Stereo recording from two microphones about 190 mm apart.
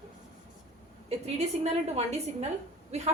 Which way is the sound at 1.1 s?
35° right (ahead or behind).